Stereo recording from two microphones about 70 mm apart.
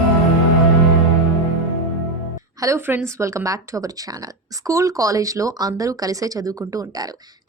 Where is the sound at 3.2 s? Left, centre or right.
Right.